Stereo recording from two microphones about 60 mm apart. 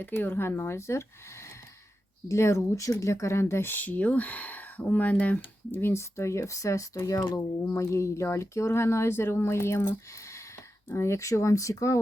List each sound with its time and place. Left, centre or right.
0.0 s speech: left
3.8 s speech: left
5.8 s speech: left
7.2 s speech: left